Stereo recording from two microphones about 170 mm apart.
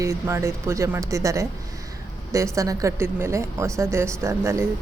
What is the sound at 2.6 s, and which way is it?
A woman's voice, 20° right (ahead or behind).